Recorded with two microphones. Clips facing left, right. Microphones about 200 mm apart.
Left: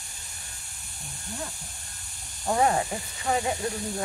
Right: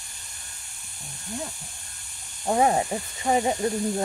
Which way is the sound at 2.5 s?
20° right (ahead or behind).